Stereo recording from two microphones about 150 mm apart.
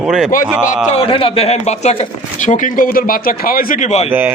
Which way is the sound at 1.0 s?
40° left (ahead or behind).